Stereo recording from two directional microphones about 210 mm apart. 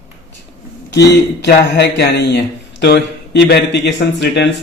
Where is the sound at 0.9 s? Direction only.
55° left (ahead or behind).